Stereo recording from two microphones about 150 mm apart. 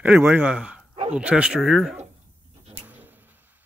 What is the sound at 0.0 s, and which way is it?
Speech, 10° right (ahead or behind).